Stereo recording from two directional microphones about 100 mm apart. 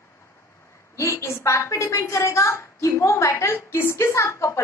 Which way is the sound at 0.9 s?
30° left (ahead or behind).